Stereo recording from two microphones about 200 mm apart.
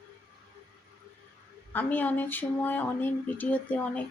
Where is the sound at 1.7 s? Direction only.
10° left (ahead or behind).